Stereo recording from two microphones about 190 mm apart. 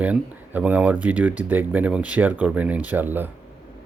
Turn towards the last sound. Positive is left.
turn(degrees=-10)  # may be behind; listen again after turning